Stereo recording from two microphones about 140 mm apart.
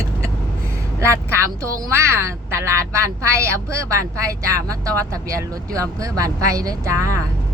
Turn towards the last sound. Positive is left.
turn(degrees=-20)  # may be behind; listen again after turning